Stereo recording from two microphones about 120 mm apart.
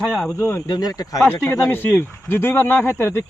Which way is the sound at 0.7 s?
30° left (ahead or behind).